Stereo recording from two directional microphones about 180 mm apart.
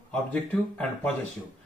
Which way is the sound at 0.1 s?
5° left (ahead or behind).